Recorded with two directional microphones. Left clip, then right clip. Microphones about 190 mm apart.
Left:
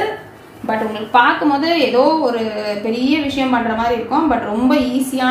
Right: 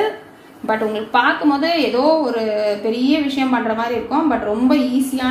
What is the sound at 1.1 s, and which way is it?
A woman's voice, 40° right (ahead or behind).